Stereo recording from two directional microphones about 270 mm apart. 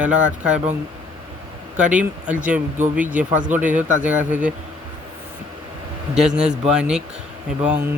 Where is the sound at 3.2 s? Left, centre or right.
Right.